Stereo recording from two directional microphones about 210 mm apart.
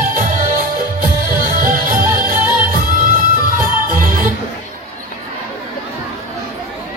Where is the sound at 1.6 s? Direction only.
40° right (ahead or behind).